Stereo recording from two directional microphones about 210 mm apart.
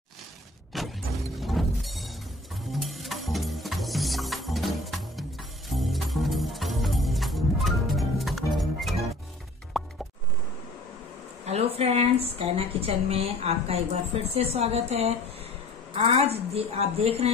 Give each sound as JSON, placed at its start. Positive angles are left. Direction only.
{"t": 0.7, "sound": "vehicle", "side_deg": 0}
{"t": 1.4, "sound": "music", "side_deg": 0}
{"t": 11.4, "sound": "a woman's voice", "side_deg": -30}